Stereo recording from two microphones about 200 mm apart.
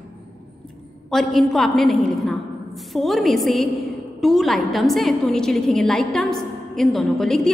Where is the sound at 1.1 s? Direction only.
Centre (ahead or behind).